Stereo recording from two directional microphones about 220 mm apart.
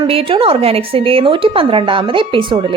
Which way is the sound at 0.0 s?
25° right (ahead or behind).